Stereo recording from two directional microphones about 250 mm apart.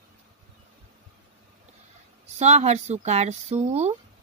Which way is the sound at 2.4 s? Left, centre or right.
Right.